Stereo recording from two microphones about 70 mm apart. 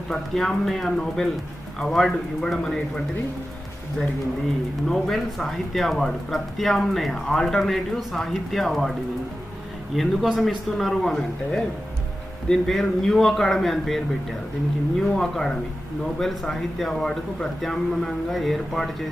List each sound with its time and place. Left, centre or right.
0.1 s speech: centre
4.8 s speech: centre
9.9 s speech: centre